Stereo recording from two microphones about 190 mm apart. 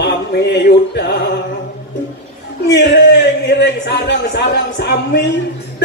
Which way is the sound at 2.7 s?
65° left (ahead or behind).